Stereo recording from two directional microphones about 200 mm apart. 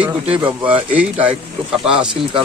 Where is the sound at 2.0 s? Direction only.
25° right (ahead or behind).